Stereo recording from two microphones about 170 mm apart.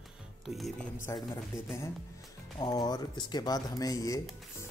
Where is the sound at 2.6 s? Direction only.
25° left (ahead or behind).